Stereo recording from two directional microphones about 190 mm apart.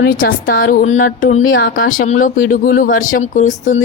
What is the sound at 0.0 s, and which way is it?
Speech, 50° left (ahead or behind).